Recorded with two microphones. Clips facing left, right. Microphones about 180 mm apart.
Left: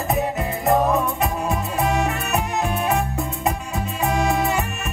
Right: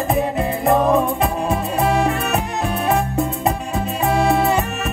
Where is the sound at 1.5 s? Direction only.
35° right (ahead or behind).